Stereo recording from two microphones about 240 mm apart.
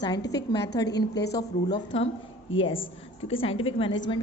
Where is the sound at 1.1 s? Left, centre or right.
Left.